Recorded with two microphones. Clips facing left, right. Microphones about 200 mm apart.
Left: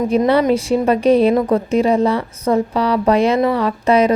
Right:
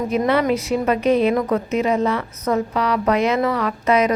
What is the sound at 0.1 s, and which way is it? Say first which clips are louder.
A woman's voice: left 4 dB; 30° left (ahead or behind).